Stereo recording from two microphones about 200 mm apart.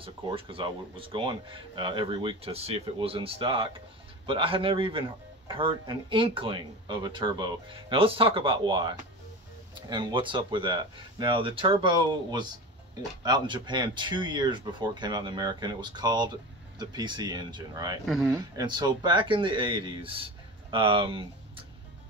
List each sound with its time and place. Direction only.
0.0 s speech: 25° right (ahead or behind)
18.0 s speech: centre (ahead or behind)
18.3 s speech: 20° right (ahead or behind)